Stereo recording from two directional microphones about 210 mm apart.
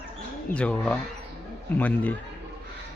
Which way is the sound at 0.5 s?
5° left (ahead or behind).